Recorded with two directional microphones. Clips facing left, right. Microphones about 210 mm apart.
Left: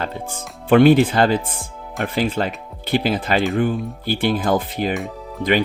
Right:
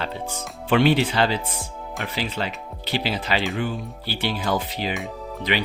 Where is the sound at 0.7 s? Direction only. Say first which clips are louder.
Left 7 dB; 50° left (ahead or behind).